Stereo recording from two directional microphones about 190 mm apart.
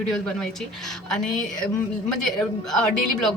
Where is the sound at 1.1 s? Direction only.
5° left (ahead or behind).